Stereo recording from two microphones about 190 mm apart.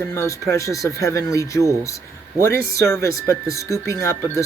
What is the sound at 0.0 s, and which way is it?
Speech, 15° left (ahead or behind).